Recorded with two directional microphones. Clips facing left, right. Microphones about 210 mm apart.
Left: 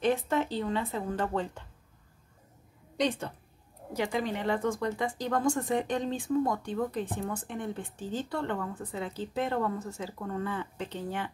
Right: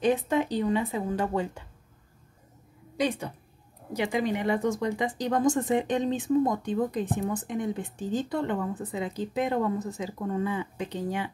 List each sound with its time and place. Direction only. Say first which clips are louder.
0.0 s speech: right 3 dB; 15° right (ahead or behind)
3.0 s speech: right 1 dB; 10° right (ahead or behind)